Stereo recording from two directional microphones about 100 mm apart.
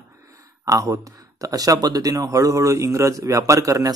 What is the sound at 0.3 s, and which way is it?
Speech, 35° right (ahead or behind).